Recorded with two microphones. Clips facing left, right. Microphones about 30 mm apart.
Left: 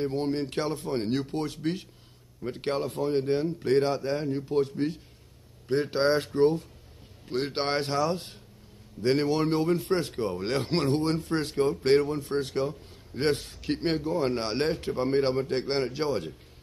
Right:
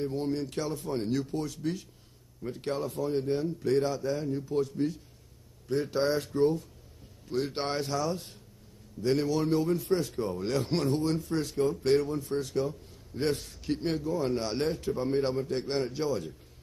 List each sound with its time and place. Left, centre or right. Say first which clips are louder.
0.0 s speech: left 3 dB; left